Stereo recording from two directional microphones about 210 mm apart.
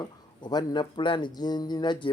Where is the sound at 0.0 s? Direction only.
20° left (ahead or behind).